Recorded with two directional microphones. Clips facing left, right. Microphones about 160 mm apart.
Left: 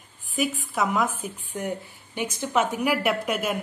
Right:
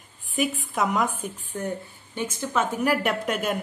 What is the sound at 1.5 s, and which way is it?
A woman's voice, 10° left (ahead or behind).